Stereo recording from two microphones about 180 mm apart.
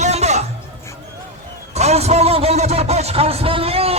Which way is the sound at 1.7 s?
40° right (ahead or behind).